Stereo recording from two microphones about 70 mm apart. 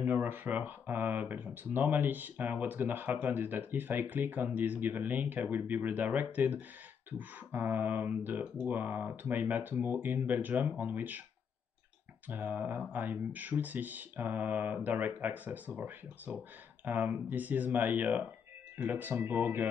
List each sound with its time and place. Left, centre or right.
0.0 s speech: right
12.3 s speech: right